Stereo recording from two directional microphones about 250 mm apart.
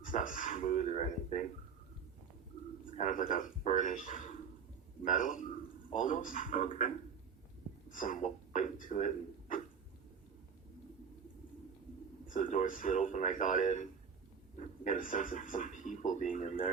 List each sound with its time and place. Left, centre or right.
0.0 s speech: left
2.8 s speech: left
12.3 s speech: left
14.8 s speech: left